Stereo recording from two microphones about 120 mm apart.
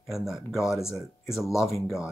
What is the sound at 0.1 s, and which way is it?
Speech, centre (ahead or behind).